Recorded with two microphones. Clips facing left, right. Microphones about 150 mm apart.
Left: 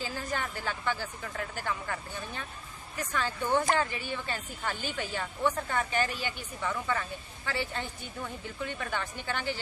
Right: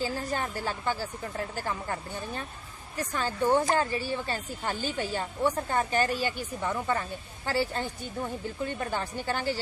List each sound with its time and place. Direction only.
0.0 s speech: 35° right (ahead or behind)